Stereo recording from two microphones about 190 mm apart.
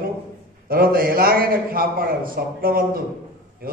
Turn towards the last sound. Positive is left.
turn(degrees=-50)  # may be behind; listen again after turning